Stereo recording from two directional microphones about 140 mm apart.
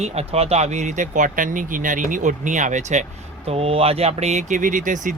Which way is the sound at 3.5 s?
45° right (ahead or behind).